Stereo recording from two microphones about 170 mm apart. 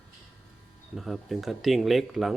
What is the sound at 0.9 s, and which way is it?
Speech, centre (ahead or behind).